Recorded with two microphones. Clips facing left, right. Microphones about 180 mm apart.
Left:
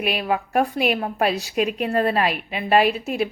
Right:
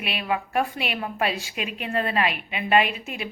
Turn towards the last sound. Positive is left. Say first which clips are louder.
# left 4 dB
turn(degrees=40)  # may be behind; listen again after turning